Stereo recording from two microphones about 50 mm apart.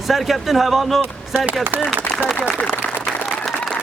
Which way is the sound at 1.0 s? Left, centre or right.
Right.